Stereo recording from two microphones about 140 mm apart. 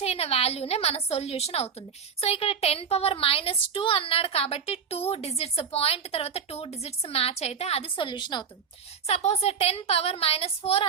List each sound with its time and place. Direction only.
0.0 s a woman's voice: 45° left (ahead or behind)
9.0 s a woman's voice: 50° left (ahead or behind)